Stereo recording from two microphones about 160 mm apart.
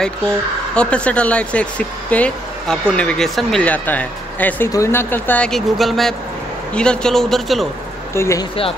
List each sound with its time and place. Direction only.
0.7 s a man's voice: 5° left (ahead or behind)
8.1 s speech: 15° left (ahead or behind)